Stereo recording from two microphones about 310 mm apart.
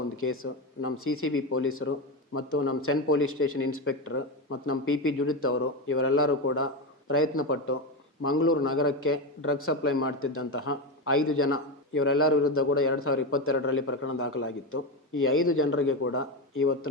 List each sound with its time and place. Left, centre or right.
0.2 s a man's voice: left